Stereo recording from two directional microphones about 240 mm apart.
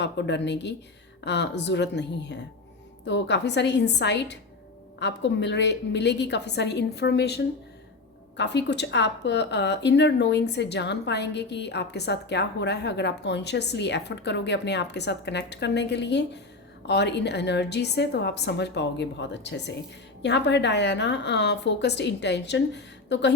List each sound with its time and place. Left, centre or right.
0.0 s speech: left